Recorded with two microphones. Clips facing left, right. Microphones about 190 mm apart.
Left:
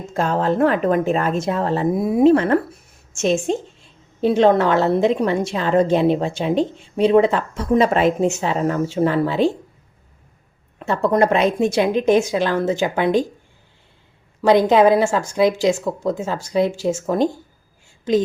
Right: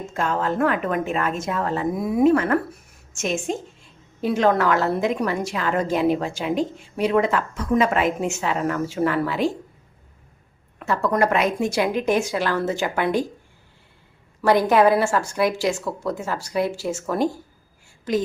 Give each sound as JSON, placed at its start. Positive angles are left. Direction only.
{"t": 0.1, "sound": "a woman's voice", "side_deg": 35}
{"t": 10.8, "sound": "a woman's voice", "side_deg": 25}
{"t": 14.4, "sound": "a woman's voice", "side_deg": 20}